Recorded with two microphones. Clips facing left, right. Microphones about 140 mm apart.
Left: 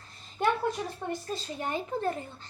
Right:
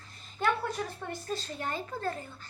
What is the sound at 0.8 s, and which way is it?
A woman's voice, 10° left (ahead or behind).